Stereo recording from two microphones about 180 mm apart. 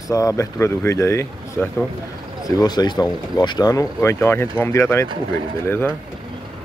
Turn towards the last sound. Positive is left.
turn(degrees=10)  # may be behind; listen again after turning